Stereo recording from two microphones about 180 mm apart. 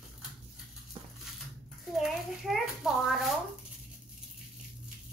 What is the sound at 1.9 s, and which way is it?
A child's voice, centre (ahead or behind).